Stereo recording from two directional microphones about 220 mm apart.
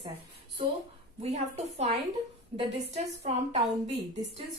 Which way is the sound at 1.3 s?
30° right (ahead or behind).